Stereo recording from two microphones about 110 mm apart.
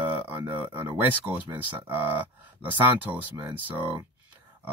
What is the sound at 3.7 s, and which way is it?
Speech, 15° right (ahead or behind).